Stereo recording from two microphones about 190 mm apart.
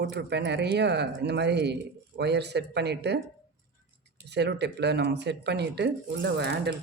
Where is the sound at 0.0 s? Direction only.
65° right (ahead or behind).